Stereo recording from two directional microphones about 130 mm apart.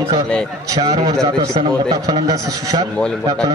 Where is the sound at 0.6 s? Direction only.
30° right (ahead or behind).